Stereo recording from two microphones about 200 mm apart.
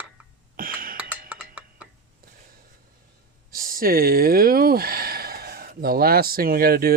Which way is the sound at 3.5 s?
45° right (ahead or behind).